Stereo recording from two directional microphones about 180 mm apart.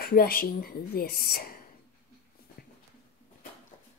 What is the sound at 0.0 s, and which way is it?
Speech, 55° left (ahead or behind).